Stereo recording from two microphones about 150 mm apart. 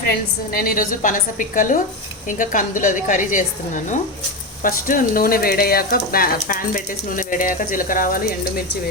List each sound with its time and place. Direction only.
0.5 s a woman's voice: 70° left (ahead or behind)
4.6 s speech: 65° left (ahead or behind)